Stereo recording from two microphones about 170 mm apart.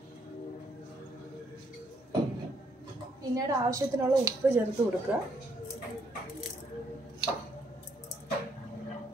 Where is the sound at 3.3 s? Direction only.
20° right (ahead or behind).